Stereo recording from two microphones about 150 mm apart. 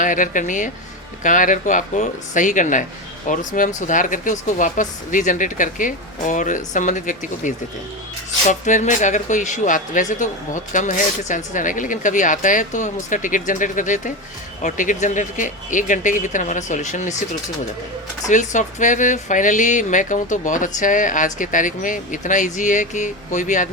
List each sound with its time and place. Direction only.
0.0 s speech: 60° left (ahead or behind)
18.3 s speech: 55° left (ahead or behind)